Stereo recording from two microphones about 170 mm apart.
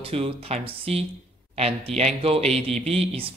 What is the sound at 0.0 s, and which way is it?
Speech, 35° right (ahead or behind).